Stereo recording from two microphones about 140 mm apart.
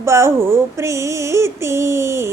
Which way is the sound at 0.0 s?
20° right (ahead or behind).